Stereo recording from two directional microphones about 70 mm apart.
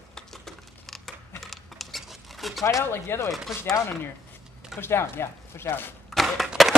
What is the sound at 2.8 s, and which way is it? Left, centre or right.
Speech, left.